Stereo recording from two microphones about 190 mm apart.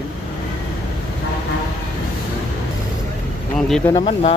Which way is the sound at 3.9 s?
30° left (ahead or behind).